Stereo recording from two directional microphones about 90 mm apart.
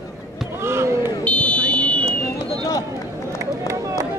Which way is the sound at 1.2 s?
15° left (ahead or behind).